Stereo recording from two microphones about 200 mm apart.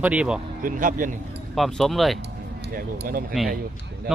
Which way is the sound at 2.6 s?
50° right (ahead or behind).